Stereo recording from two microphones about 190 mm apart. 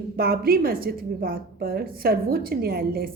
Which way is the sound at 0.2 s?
55° right (ahead or behind).